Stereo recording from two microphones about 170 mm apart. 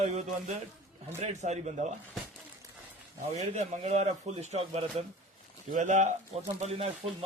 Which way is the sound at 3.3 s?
40° right (ahead or behind).